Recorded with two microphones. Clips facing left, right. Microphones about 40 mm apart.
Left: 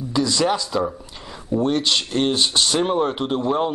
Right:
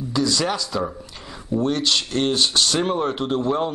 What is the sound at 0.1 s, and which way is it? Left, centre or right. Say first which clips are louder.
Speech: left 2 dB; centre.